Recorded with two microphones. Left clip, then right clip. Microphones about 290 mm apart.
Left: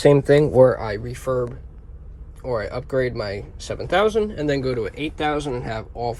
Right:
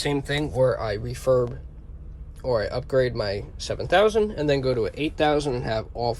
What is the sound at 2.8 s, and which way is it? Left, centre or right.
Speech, centre.